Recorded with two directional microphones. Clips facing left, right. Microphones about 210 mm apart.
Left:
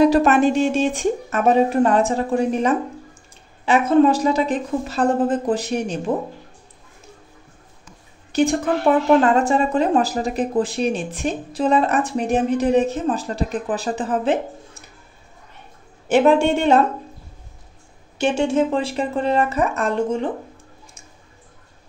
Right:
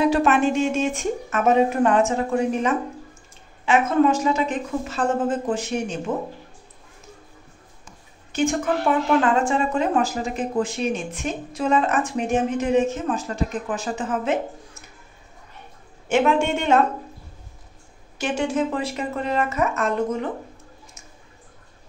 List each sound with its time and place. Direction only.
0.0 s speech: 40° left (ahead or behind)
8.3 s a woman's voice: 35° left (ahead or behind)
16.1 s speech: 35° left (ahead or behind)
18.1 s speech: 25° left (ahead or behind)